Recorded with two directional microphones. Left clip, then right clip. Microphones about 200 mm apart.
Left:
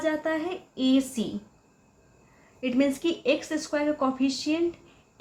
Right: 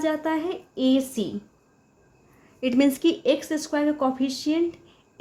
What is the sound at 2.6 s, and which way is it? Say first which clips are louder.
Speech: right 4 dB; 50° right (ahead or behind).